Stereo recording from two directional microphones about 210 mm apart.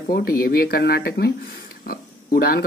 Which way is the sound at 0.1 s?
45° left (ahead or behind).